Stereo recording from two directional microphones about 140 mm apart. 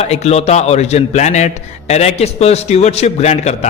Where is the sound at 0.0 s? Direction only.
50° left (ahead or behind).